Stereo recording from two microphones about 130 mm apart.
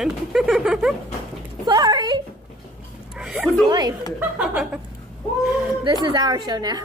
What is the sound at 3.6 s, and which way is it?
Speech, 30° right (ahead or behind).